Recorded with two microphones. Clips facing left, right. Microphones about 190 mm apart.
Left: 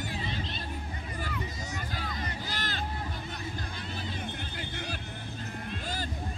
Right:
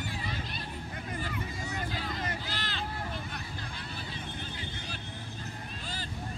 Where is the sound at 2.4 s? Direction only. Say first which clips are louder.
Left 2 dB; 45° left (ahead or behind).